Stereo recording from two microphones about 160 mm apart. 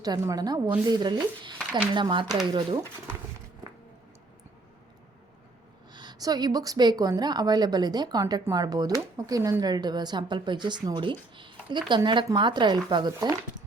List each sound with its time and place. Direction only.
0.0 s a woman's voice: 25° right (ahead or behind)
5.9 s a woman's voice: 25° right (ahead or behind)